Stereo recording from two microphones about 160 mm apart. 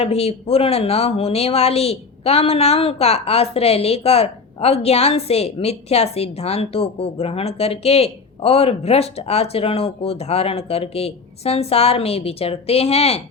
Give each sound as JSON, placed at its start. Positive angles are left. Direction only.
{"t": 0.0, "sound": "speech", "side_deg": 40}